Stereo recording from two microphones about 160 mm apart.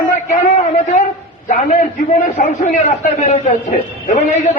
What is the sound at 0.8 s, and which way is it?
A man's voice, 50° left (ahead or behind).